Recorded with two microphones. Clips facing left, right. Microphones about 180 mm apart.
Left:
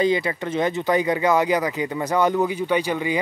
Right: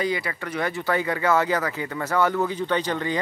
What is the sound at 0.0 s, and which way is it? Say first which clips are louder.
Speech: left 6 dB; 25° left (ahead or behind).